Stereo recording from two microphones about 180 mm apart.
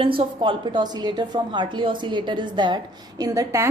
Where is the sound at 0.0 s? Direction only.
30° right (ahead or behind).